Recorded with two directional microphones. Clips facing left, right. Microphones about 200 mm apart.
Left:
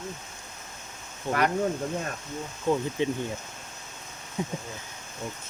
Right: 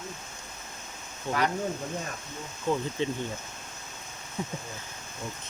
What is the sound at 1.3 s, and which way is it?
Speech, 15° left (ahead or behind).